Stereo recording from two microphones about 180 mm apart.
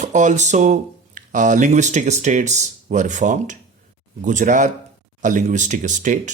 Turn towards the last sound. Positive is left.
turn(degrees=-45)  # may be behind; listen again after turning